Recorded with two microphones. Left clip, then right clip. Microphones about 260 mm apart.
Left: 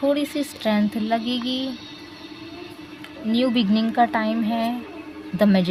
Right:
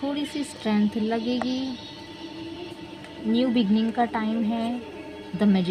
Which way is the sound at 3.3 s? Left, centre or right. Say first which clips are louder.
Left 3 dB; left.